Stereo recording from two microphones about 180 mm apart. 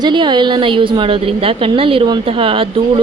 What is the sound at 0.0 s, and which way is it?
A woman's voice, 25° right (ahead or behind).